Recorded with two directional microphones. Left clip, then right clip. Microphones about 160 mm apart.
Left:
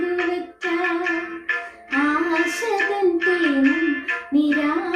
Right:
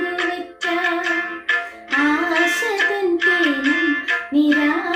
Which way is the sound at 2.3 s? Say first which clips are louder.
Right 3 dB; 35° right (ahead or behind).